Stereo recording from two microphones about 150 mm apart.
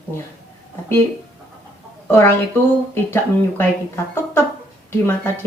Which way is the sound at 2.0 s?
15° left (ahead or behind).